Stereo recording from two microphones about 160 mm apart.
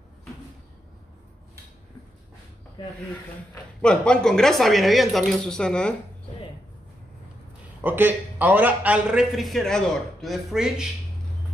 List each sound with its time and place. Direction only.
2.8 s speech: 30° left (ahead or behind)
3.8 s a man's voice: 5° left (ahead or behind)
7.8 s a man's voice: 10° right (ahead or behind)